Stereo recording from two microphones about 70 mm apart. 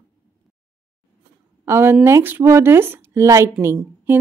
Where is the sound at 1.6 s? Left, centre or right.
Right.